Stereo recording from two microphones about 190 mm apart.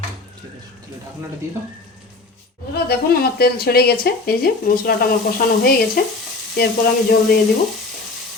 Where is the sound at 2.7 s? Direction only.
55° left (ahead or behind).